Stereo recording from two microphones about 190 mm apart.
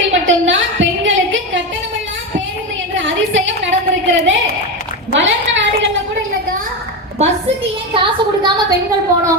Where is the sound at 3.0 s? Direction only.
80° right.